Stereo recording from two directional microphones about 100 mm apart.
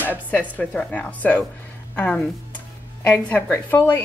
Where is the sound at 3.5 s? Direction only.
20° left (ahead or behind).